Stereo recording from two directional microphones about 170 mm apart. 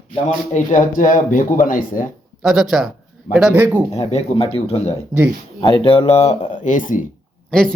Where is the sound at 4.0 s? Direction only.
40° left (ahead or behind).